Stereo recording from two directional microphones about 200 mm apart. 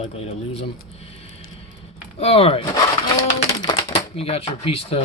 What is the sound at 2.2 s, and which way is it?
Speech, 30° left (ahead or behind).